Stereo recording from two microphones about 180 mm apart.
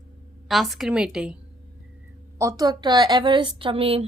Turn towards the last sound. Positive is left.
turn(degrees=-30)  # may be behind; listen again after turning